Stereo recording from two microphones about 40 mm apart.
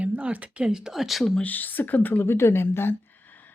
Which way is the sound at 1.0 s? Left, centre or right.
Centre.